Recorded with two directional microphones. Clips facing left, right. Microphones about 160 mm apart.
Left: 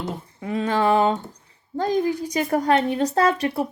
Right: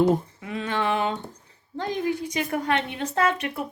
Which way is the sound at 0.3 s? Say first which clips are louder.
Left 5 dB; 35° left (ahead or behind).